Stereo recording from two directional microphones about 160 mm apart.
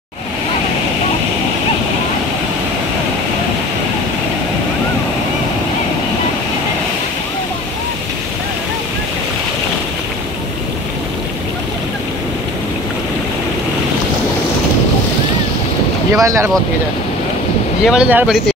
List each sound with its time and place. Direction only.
16.2 s speech: 20° right (ahead or behind)
17.8 s speech: 5° right (ahead or behind)